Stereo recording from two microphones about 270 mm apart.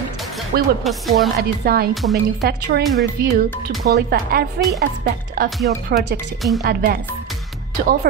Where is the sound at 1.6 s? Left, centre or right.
Right.